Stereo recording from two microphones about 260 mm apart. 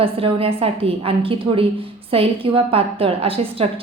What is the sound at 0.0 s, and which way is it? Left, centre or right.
A woman's voice, right.